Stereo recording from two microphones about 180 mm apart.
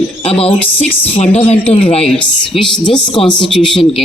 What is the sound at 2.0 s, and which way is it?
Speech, 5° left (ahead or behind).